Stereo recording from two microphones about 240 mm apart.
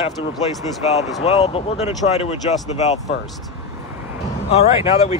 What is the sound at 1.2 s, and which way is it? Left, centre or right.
Speech, left.